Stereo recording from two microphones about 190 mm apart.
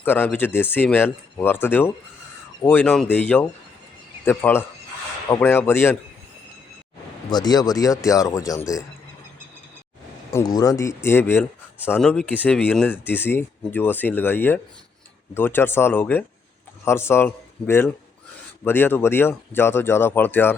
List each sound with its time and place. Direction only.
0.0 s speech: 10° left (ahead or behind)
7.3 s speech: 20° left (ahead or behind)
10.3 s speech: 20° left (ahead or behind)